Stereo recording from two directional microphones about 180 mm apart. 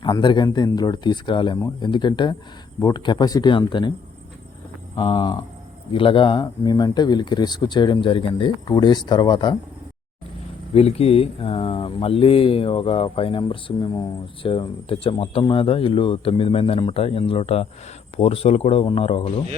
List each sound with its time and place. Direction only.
0.0 s speech: 25° left (ahead or behind)
4.9 s speech: 30° left (ahead or behind)
10.8 s speech: 35° left (ahead or behind)